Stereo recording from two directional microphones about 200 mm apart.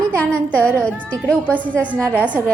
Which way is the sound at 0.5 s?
5° left (ahead or behind).